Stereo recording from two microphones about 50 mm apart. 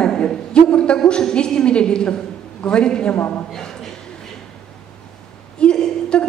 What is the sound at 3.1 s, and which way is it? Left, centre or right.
Speech, left.